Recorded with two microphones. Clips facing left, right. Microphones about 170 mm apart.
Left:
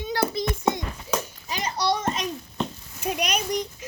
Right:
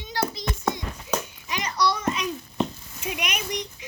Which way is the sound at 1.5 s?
30° left (ahead or behind).